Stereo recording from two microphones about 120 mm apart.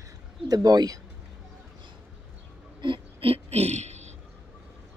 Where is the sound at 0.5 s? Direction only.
30° right (ahead or behind).